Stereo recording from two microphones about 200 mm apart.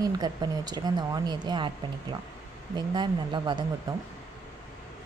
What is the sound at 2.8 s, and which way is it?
Speech, 20° right (ahead or behind).